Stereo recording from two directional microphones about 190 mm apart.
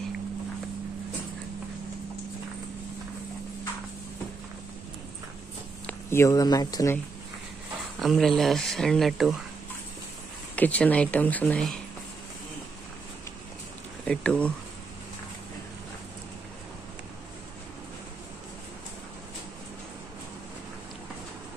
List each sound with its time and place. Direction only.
5.9 s speech: 15° left (ahead or behind)
8.0 s speech: centre (ahead or behind)
10.5 s speech: 10° left (ahead or behind)
14.0 s speech: 5° left (ahead or behind)